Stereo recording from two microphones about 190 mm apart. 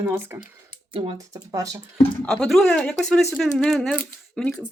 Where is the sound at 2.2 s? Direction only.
5° left (ahead or behind).